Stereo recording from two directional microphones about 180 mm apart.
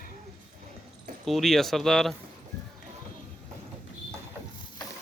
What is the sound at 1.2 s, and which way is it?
Speech, centre (ahead or behind).